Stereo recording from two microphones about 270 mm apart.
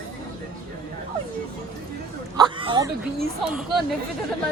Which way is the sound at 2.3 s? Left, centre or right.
Centre.